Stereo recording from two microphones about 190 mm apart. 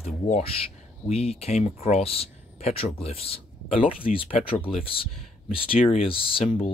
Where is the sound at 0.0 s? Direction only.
30° left (ahead or behind).